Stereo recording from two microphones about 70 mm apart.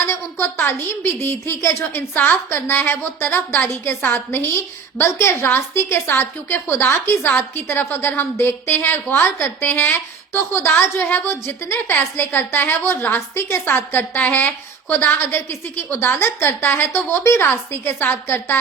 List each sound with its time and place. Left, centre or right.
0.0 s a woman's voice: left